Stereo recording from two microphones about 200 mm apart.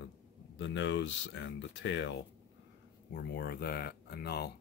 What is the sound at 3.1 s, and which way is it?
Speech, 50° left (ahead or behind).